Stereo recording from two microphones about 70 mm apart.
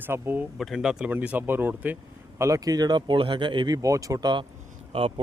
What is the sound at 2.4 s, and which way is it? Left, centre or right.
Speech, right.